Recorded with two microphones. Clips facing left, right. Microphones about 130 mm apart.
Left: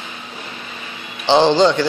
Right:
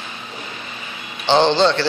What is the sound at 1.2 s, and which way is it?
Speech, 15° left (ahead or behind).